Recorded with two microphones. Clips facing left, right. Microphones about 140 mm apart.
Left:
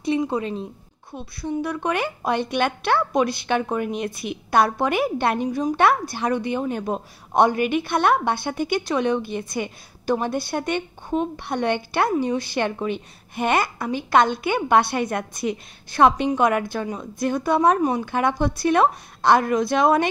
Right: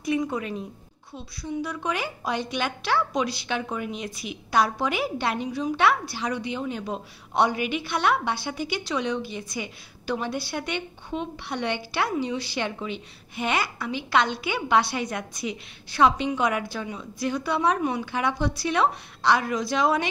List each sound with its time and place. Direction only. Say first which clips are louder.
0.0 s a woman's voice: left 4 dB; 30° left (ahead or behind)
1.1 s a woman's voice: left 4 dB; 55° left (ahead or behind)